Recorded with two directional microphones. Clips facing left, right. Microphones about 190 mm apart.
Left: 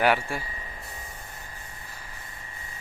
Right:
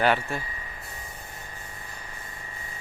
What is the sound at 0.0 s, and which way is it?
Speech, 10° left (ahead or behind).